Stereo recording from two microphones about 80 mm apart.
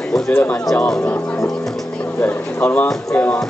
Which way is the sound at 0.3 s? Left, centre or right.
Left.